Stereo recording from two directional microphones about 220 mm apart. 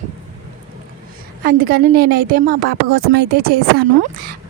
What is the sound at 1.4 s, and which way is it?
A woman's voice, 40° right (ahead or behind).